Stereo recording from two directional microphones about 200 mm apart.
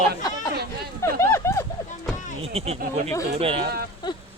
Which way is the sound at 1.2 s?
15° left (ahead or behind).